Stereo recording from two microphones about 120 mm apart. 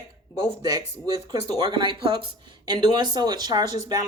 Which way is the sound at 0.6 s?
35° right (ahead or behind).